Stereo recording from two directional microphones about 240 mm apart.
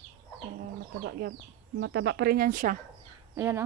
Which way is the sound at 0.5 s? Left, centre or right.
Right.